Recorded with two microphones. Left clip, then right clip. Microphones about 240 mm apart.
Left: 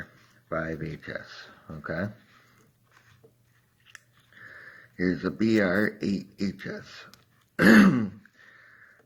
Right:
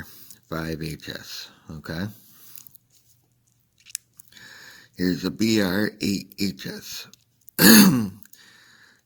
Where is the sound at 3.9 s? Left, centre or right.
Right.